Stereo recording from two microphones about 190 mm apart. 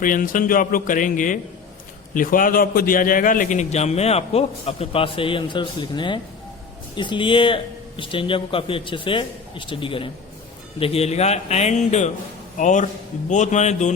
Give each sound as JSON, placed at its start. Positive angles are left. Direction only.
{"t": 0.0, "sound": "a man's voice", "side_deg": 45}